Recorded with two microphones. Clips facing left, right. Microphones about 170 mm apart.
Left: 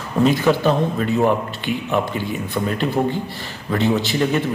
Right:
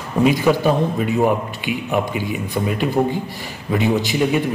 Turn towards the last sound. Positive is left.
turn(degrees=-10)  # may be behind; listen again after turning